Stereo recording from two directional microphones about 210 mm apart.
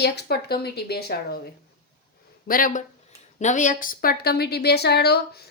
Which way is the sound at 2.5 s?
40° left (ahead or behind).